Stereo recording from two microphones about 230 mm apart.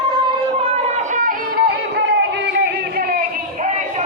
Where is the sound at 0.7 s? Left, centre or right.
Right.